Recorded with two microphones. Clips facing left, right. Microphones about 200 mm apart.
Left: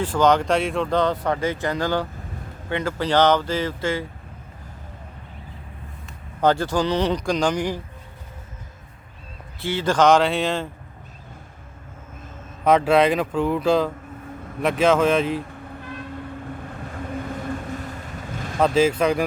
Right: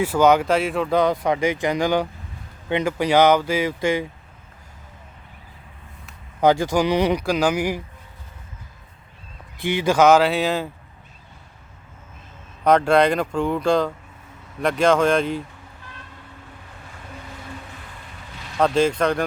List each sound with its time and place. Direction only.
0.0 s speech: 10° right (ahead or behind)
6.4 s speech: 10° right (ahead or behind)
9.6 s speech: 15° right (ahead or behind)
12.6 s speech: 5° left (ahead or behind)
18.3 s vehicle: 50° left (ahead or behind)
18.6 s speech: 5° left (ahead or behind)